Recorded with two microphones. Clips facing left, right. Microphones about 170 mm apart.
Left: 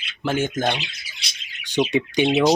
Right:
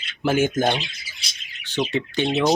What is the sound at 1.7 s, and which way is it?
Speech, 15° left (ahead or behind).